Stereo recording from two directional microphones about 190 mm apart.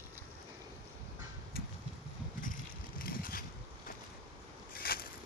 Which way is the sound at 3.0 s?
50° left (ahead or behind).